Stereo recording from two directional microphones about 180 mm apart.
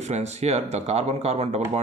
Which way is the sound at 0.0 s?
40° right (ahead or behind).